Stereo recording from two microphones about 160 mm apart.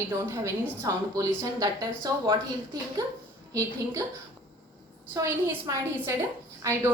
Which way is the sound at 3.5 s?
20° right (ahead or behind).